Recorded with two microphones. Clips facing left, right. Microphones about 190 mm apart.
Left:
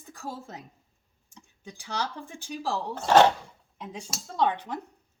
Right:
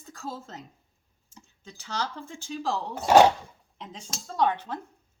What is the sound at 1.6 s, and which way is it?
Speech, 15° left (ahead or behind).